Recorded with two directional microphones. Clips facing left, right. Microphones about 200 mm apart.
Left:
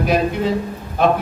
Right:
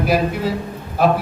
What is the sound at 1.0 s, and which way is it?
Speech, 5° right (ahead or behind).